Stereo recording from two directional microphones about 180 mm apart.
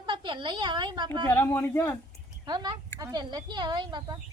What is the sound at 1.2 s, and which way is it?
Speech, 10° left (ahead or behind).